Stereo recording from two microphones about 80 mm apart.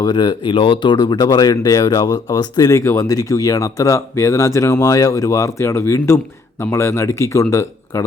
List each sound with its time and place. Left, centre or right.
0.0 s speech: left